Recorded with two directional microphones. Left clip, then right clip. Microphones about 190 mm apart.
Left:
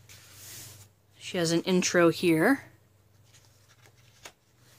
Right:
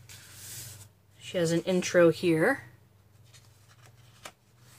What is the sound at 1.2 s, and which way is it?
Speech, 45° left (ahead or behind).